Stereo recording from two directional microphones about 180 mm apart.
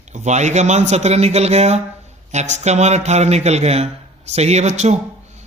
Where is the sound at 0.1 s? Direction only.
40° right (ahead or behind).